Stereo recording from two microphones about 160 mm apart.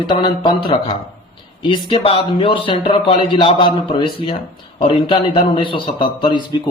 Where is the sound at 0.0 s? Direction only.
30° left (ahead or behind).